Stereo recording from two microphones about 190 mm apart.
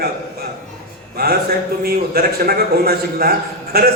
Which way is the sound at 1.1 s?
55° right (ahead or behind).